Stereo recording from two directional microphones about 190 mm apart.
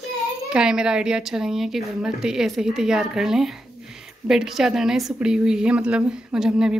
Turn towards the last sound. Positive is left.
turn(degrees=-5)  # may be behind; listen again after turning